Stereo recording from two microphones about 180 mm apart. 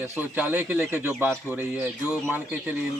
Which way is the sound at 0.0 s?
10° right (ahead or behind).